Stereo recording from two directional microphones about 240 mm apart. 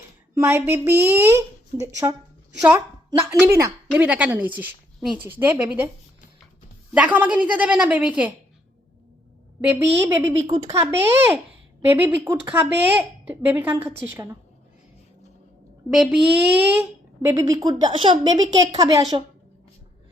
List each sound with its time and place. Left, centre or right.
0.3 s a woman's voice: centre
6.9 s a woman's voice: centre
9.6 s a woman's voice: centre
15.9 s a woman's voice: centre